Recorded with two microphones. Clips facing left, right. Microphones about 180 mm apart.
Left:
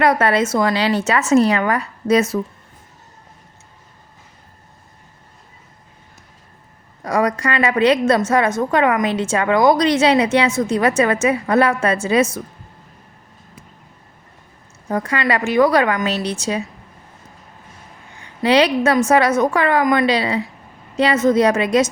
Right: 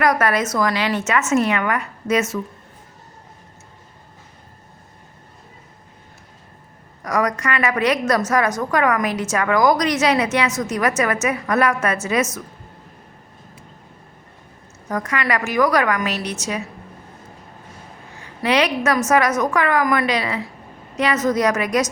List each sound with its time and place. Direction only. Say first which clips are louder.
0.0 s a woman's voice: left 3 dB; 30° left (ahead or behind)
7.0 s a woman's voice: left 3 dB; 30° left (ahead or behind)
14.8 s a woman's voice: left 3 dB; 30° left (ahead or behind)
18.4 s a woman's voice: left 4 dB; 30° left (ahead or behind)